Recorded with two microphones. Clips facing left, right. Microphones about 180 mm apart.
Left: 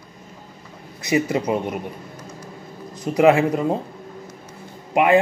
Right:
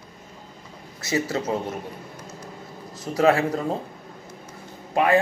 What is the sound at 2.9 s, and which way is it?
Speech, 20° left (ahead or behind).